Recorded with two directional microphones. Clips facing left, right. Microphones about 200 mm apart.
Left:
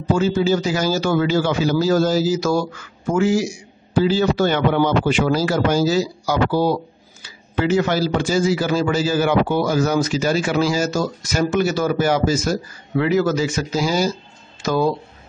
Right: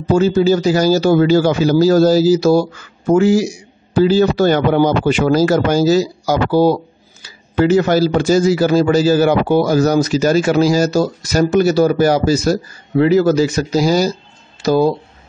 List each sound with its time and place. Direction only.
0.1 s speech: 40° right (ahead or behind)